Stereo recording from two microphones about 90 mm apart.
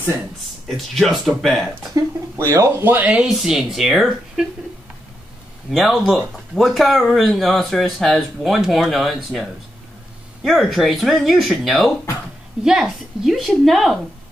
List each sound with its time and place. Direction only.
0.7 s speech: centre (ahead or behind)
2.3 s speech: 30° right (ahead or behind)
3.2 s speech: 5° right (ahead or behind)
5.7 s speech: centre (ahead or behind)